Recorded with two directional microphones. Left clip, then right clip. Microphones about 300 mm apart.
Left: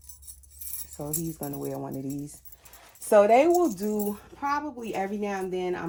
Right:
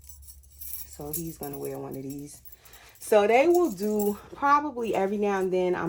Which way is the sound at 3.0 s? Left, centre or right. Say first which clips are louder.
Left 2 dB; centre.